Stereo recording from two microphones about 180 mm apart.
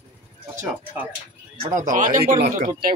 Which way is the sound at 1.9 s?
50° right (ahead or behind).